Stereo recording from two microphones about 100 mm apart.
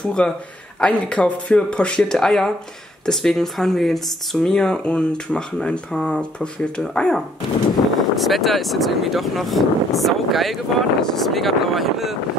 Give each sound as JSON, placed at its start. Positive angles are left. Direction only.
{"t": 0.2, "sound": "speech", "side_deg": 10}